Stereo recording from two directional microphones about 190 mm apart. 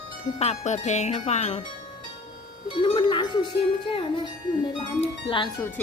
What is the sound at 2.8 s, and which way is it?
Music, 25° left (ahead or behind).